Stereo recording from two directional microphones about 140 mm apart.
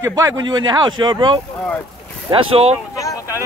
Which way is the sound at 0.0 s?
25° right (ahead or behind).